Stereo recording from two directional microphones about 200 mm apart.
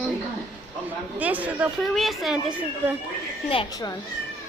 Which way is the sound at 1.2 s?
10° right (ahead or behind).